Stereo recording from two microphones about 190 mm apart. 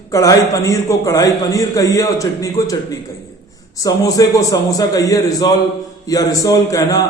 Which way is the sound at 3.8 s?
20° left (ahead or behind).